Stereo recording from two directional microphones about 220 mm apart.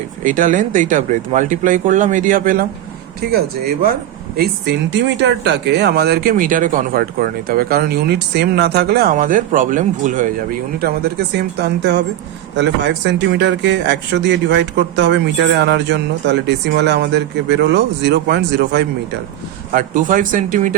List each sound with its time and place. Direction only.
0.3 s speech: 35° right (ahead or behind)
11.6 s speech: 50° right (ahead or behind)
19.7 s speech: 40° right (ahead or behind)